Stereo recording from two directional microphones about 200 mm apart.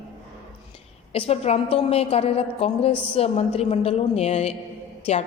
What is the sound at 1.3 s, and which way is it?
A woman's voice, 30° left (ahead or behind).